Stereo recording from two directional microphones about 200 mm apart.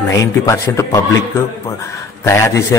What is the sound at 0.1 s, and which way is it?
Speech, 15° left (ahead or behind).